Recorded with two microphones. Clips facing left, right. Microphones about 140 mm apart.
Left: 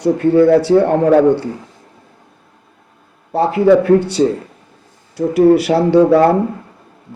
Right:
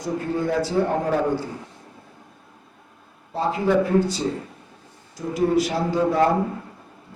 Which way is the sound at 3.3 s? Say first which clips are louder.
Left 9 dB; 70° left (ahead or behind).